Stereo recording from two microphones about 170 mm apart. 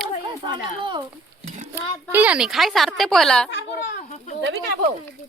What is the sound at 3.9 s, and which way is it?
Speech, 45° left (ahead or behind).